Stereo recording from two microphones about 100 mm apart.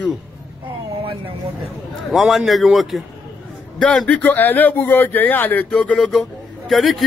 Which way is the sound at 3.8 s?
10° left (ahead or behind).